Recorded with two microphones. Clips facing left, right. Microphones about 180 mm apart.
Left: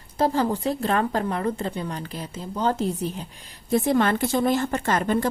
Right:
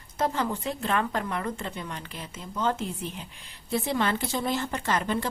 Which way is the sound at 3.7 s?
50° left (ahead or behind).